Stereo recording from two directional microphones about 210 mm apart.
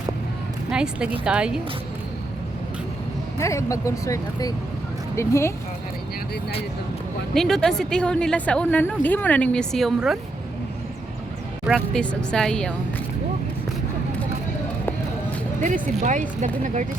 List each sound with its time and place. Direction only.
0.7 s speech: 5° right (ahead or behind)
3.3 s speech: 15° left (ahead or behind)
7.3 s speech: centre (ahead or behind)
11.6 s speech: centre (ahead or behind)
15.6 s speech: 35° right (ahead or behind)